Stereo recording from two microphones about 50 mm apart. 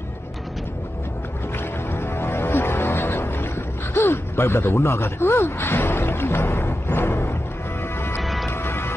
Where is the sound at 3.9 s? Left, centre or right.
Left.